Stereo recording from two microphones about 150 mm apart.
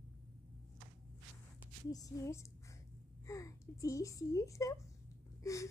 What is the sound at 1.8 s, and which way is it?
A woman's voice, 25° left (ahead or behind).